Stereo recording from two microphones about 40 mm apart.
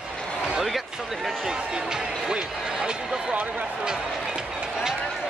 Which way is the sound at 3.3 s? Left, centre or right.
Right.